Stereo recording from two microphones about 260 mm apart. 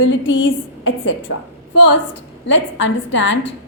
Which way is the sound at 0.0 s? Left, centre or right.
Left.